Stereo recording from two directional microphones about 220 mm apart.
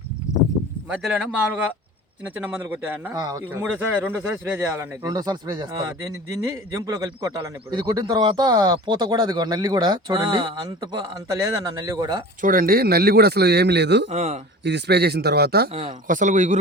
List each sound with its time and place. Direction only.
0.9 s speech: 5° right (ahead or behind)
12.4 s a man's voice: 40° right (ahead or behind)
14.1 s speech: 30° right (ahead or behind)
14.6 s a man's voice: 50° right (ahead or behind)
15.7 s speech: 25° right (ahead or behind)
16.0 s speech: 35° right (ahead or behind)